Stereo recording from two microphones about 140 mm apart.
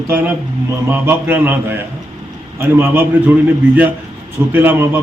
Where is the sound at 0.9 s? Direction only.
15° right (ahead or behind).